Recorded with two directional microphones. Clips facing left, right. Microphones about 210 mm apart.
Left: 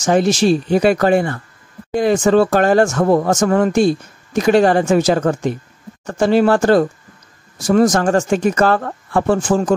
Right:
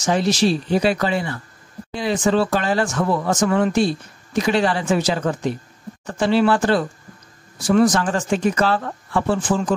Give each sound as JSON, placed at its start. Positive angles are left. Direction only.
{"t": 0.0, "sound": "speech", "side_deg": 50}